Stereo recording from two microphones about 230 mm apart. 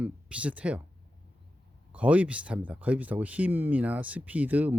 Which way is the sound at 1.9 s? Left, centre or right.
Centre.